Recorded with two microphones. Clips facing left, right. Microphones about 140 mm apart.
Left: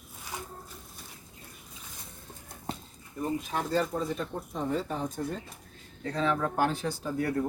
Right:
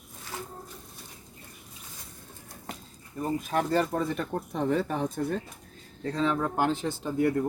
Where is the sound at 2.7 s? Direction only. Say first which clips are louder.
Left 4 dB; 30° left (ahead or behind).